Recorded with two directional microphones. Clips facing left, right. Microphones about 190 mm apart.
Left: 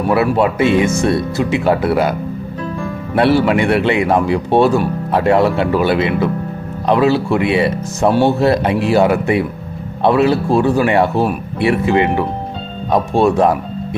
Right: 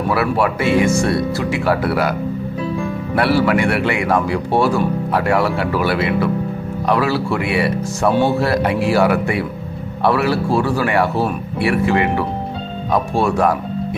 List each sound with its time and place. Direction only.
0.1 s speech: 20° left (ahead or behind)
3.2 s speech: 20° left (ahead or behind)